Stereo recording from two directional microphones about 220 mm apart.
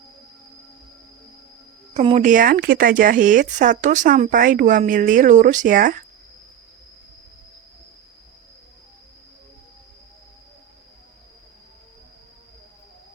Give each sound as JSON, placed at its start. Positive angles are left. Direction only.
{"t": 1.9, "sound": "speech", "side_deg": -30}